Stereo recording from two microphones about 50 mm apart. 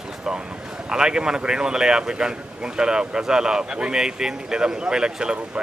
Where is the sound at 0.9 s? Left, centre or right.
Centre.